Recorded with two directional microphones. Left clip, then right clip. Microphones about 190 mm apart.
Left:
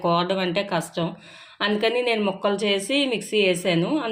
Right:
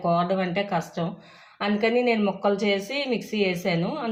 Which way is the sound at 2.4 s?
50° left (ahead or behind).